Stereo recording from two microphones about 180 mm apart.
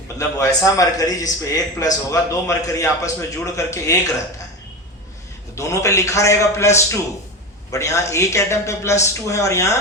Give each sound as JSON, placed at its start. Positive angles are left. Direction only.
{"t": 0.2, "sound": "a man's voice", "side_deg": 20}
{"t": 5.5, "sound": "a man's voice", "side_deg": 15}